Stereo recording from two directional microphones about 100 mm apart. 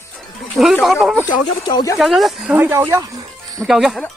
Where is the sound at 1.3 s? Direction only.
50° left (ahead or behind).